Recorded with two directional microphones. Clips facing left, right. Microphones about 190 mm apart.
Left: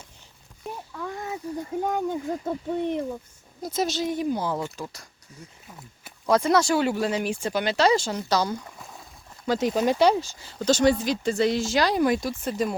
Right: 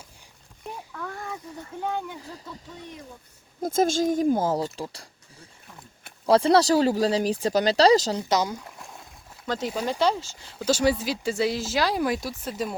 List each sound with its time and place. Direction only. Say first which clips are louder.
0.6 s a sound: left 2 dB; 10° left (ahead or behind)
1.5 s speech: left 4 dB; 40° left (ahead or behind); by 3.0 s 60° left (ahead or behind)
3.6 s speech: right 4 dB; 50° right (ahead or behind); by 5.0 s 30° right (ahead or behind)
6.2 s speech: right 2 dB; 30° right (ahead or behind)
8.3 s speech: left 1 dB; 20° right (ahead or behind)
8.5 s a sound: left 2 dB; centre (ahead or behind)
9.5 s speech: left 5 dB; 20° left (ahead or behind)
10.4 s speech: left 2 dB; 5° right (ahead or behind)